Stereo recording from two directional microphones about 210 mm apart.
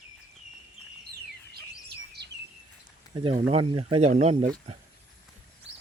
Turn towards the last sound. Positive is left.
turn(degrees=-30)  # may be behind; listen again after turning